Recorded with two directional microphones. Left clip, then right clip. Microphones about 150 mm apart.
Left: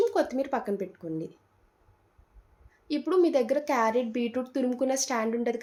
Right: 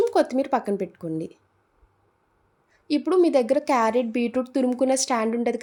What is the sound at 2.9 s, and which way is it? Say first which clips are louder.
Speech: right 5 dB; 70° right (ahead or behind).